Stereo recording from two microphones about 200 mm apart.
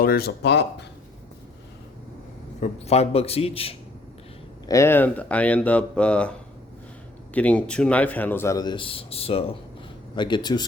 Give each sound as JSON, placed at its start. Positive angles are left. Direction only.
{"t": 0.0, "sound": "speech", "side_deg": 50}
{"t": 2.6, "sound": "a man's voice", "side_deg": 30}
{"t": 4.6, "sound": "a man's voice", "side_deg": 15}
{"t": 7.3, "sound": "a man's voice", "side_deg": 5}